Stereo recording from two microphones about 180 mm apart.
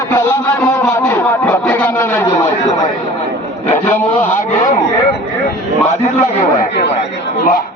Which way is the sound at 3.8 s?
10° left (ahead or behind).